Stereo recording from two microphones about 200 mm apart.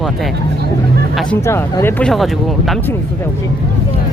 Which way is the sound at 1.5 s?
10° left (ahead or behind).